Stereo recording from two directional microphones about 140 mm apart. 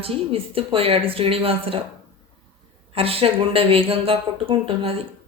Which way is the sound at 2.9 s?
45° right (ahead or behind).